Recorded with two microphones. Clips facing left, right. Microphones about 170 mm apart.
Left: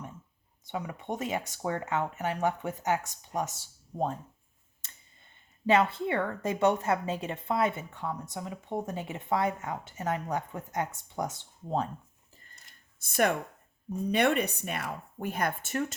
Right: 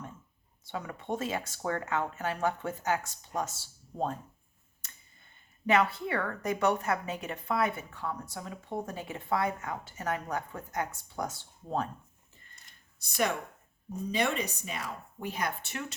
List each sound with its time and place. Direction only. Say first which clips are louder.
0.6 s speech: left 2 dB; 15° left (ahead or behind)
4.8 s clicking: even; 25° left (ahead or behind)
5.6 s a woman's voice: left 2 dB; 25° left (ahead or behind)
13.0 s speech: left 4 dB; 55° left (ahead or behind)